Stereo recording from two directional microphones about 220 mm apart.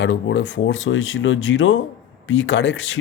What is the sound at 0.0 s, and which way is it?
Speech, 55° left (ahead or behind).